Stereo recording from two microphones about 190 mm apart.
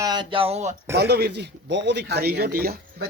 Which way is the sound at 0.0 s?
25° right (ahead or behind).